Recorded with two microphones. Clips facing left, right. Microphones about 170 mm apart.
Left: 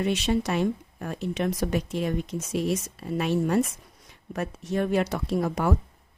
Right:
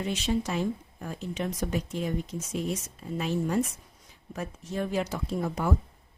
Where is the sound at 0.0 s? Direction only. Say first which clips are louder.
Left 4 dB; 70° left (ahead or behind).